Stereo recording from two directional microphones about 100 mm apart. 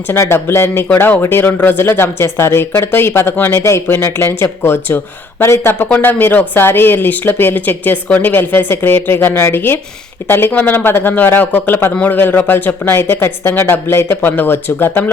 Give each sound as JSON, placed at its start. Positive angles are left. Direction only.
{"t": 0.1, "sound": "speech", "side_deg": 25}